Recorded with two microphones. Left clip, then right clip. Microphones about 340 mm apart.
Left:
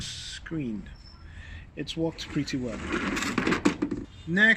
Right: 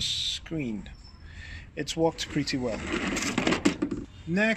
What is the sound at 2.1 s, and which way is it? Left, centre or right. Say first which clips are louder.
Speech: right 2 dB; centre.